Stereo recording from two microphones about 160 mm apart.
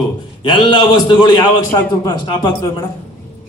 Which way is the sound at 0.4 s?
30° left (ahead or behind).